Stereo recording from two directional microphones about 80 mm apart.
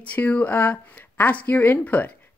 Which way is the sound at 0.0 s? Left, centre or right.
Centre.